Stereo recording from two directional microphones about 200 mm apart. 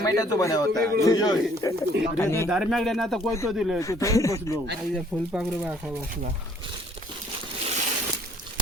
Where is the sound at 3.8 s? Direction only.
15° left (ahead or behind).